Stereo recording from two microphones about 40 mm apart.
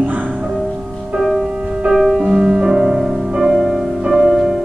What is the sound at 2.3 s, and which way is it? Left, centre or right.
Music, right.